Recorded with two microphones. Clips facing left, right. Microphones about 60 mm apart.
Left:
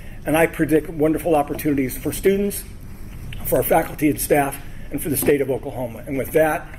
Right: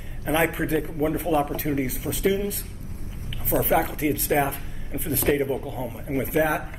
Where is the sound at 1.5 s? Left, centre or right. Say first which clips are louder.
Left 5 dB; left.